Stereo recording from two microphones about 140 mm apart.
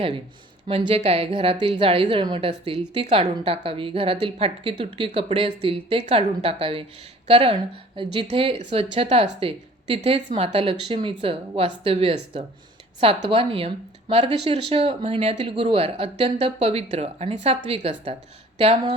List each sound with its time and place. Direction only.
0.7 s a woman's voice: 45° right (ahead or behind)
15.2 s a woman's voice: 50° right (ahead or behind)